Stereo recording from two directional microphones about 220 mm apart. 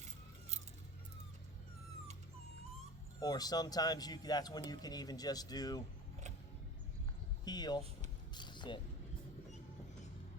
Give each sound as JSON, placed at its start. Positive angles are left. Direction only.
{"t": 3.2, "sound": "speech", "side_deg": 15}
{"t": 7.4, "sound": "speech", "side_deg": 20}
{"t": 8.4, "sound": "a sound", "side_deg": 20}